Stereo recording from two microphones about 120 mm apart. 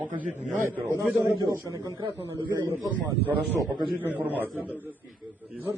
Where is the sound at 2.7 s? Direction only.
15° right (ahead or behind).